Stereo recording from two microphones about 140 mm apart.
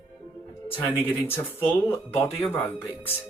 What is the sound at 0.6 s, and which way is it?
Speech, 15° left (ahead or behind).